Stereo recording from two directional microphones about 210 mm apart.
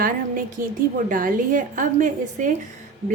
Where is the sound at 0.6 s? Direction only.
40° right (ahead or behind).